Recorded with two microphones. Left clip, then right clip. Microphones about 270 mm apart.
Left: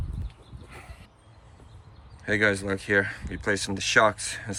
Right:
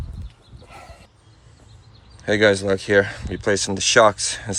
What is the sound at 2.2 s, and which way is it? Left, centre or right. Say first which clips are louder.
Speech: right 7 dB; centre.